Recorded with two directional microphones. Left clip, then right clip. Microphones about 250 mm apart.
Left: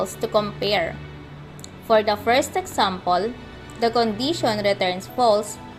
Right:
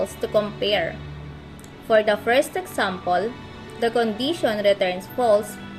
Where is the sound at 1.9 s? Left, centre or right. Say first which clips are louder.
Even; centre.